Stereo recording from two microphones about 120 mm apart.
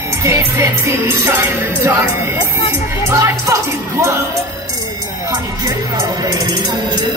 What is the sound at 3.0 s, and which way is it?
Music, 25° right (ahead or behind).